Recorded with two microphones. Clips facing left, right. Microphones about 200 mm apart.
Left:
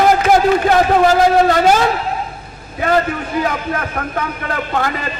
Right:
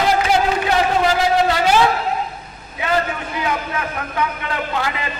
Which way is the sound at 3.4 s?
45° left (ahead or behind).